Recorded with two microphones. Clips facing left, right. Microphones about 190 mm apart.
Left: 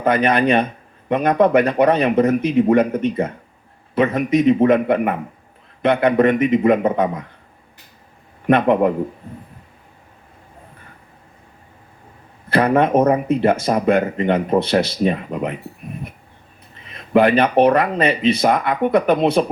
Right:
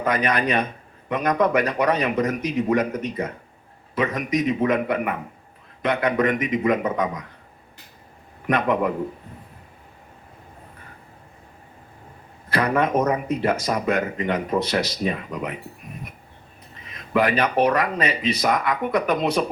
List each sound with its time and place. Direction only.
0.0 s speech: 30° left (ahead or behind)
8.4 s speech: 30° left (ahead or behind)
12.5 s speech: 30° left (ahead or behind)
16.9 s speech: 30° left (ahead or behind)